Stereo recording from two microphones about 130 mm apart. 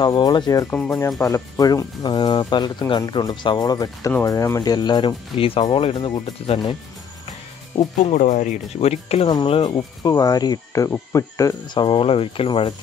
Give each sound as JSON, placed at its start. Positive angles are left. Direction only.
{"t": 0.0, "sound": "speech", "side_deg": 35}
{"t": 8.0, "sound": "speech", "side_deg": 70}
{"t": 9.3, "sound": "speech", "side_deg": 35}